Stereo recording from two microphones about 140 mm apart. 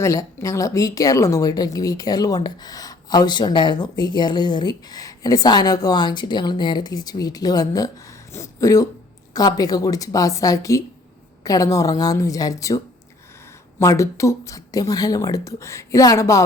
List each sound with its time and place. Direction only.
0.0 s speech: 20° left (ahead or behind)